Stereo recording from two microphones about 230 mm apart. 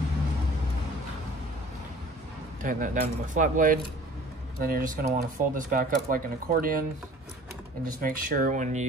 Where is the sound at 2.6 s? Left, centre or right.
Right.